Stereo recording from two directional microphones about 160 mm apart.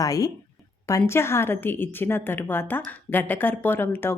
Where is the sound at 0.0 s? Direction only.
20° left (ahead or behind).